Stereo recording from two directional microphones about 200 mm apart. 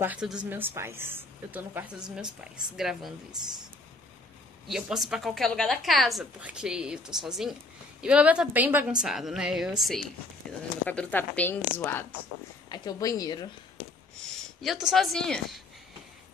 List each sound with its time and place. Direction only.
0.0 s a woman's voice: 5° right (ahead or behind)
4.6 s a woman's voice: centre (ahead or behind); by 13.5 s 20° left (ahead or behind)
14.6 s a woman's voice: centre (ahead or behind)